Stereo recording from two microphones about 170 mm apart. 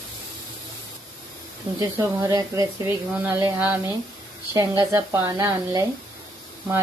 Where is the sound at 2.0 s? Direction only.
20° right (ahead or behind).